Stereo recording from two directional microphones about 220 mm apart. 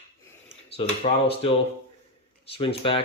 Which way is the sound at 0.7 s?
25° left (ahead or behind).